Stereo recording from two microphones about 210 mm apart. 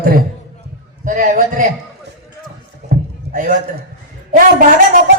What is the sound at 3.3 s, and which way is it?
Speech, 40° right (ahead or behind).